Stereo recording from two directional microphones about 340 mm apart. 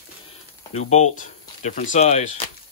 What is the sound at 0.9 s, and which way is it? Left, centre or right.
Speech, left.